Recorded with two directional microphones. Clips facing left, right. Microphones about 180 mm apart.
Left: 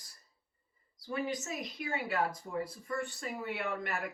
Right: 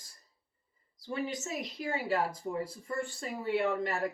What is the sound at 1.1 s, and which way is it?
Speech, 30° right (ahead or behind).